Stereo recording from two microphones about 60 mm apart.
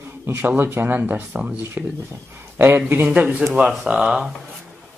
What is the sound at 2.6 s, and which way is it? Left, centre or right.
Speech, right.